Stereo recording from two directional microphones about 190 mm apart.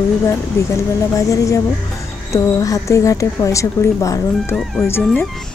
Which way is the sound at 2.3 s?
15° left (ahead or behind).